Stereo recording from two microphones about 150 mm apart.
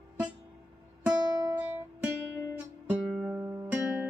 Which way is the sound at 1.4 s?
25° right (ahead or behind).